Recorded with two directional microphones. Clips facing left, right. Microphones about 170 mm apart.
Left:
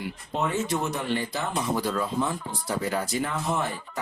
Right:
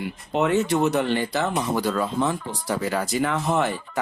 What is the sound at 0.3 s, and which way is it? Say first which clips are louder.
Speech: right 6 dB; 70° right (ahead or behind).